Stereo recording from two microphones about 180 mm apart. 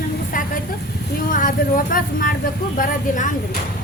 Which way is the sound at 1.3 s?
50° left (ahead or behind).